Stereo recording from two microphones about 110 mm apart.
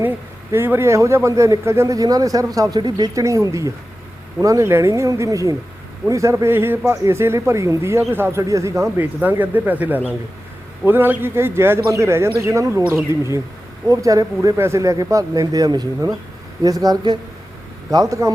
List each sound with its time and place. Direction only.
0.5 s speech: 20° right (ahead or behind)